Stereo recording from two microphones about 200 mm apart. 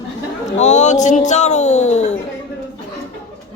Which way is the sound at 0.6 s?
35° left (ahead or behind).